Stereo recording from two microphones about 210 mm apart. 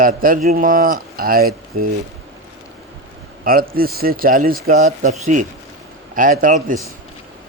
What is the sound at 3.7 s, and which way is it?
A man's voice, 45° right (ahead or behind).